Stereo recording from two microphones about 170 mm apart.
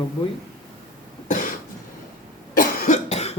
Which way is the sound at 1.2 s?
50° left (ahead or behind).